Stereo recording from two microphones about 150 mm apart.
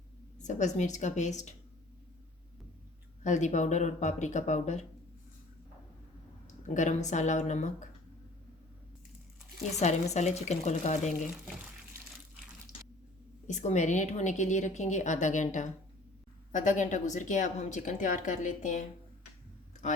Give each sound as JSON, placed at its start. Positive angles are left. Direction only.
{"t": 0.4, "sound": "a woman's voice", "side_deg": 50}
{"t": 3.2, "sound": "a woman's voice", "side_deg": 55}
{"t": 6.7, "sound": "a woman's voice", "side_deg": 55}
{"t": 9.7, "sound": "a woman's voice", "side_deg": 50}
{"t": 13.5, "sound": "a woman's voice", "side_deg": 50}